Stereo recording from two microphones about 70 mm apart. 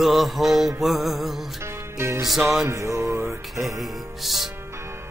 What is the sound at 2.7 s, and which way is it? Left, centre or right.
Music, right.